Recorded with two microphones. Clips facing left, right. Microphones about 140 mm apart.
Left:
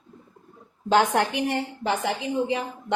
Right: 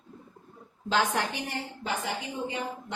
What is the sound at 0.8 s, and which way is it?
A woman's voice, 55° left (ahead or behind).